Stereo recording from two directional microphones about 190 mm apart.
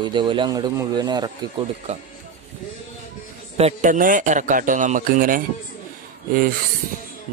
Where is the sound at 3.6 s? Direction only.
35° right (ahead or behind).